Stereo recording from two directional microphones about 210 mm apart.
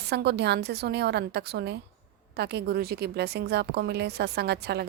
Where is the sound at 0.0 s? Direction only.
50° right (ahead or behind).